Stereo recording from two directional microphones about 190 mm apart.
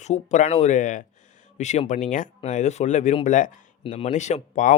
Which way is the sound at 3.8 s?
30° left (ahead or behind).